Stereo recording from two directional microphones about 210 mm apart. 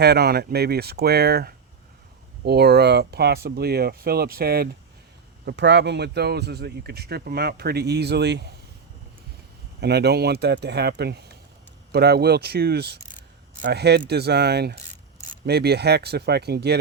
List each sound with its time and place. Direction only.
0.0 s speech: 50° right (ahead or behind)
9.8 s speech: 50° right (ahead or behind)